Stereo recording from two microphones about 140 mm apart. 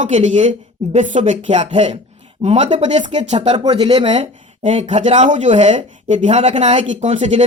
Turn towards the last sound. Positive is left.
turn(degrees=-60)  # may be behind; listen again after turning